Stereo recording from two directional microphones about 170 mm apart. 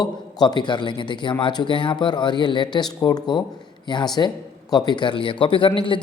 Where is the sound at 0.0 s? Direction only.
25° left (ahead or behind).